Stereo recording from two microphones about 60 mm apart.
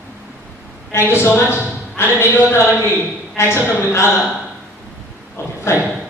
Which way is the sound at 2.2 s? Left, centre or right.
Left.